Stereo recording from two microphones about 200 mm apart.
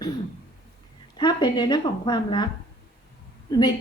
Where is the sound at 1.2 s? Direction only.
20° left (ahead or behind).